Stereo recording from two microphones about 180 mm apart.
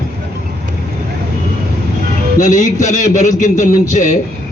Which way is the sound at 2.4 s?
40° left (ahead or behind).